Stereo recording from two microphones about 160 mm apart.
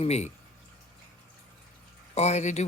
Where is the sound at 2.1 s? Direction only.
45° left (ahead or behind).